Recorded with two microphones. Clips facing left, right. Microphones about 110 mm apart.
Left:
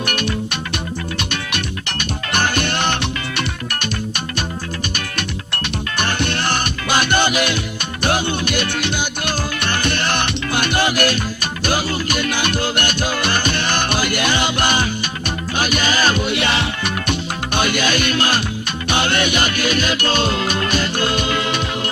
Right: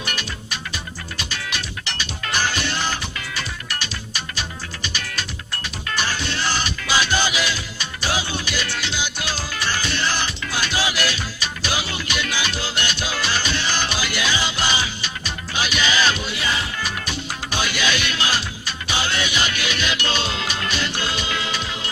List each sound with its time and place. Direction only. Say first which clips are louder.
0.0 s music: left 9 dB; 60° left (ahead or behind)